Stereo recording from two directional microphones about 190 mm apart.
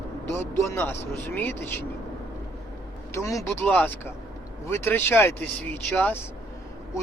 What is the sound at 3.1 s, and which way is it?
Speech, 15° left (ahead or behind).